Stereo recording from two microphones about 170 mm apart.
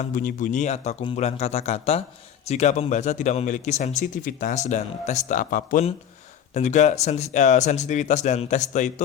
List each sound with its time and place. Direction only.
0.0 s a man's voice: 50° left (ahead or behind)